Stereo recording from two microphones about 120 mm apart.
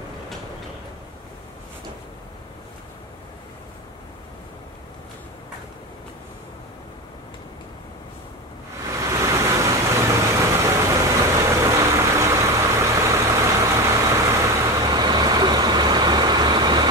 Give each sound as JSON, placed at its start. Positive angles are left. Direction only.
{"t": 9.0, "sound": "vehicle", "side_deg": -25}